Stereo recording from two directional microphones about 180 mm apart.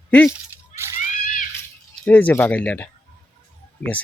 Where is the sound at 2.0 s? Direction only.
10° left (ahead or behind).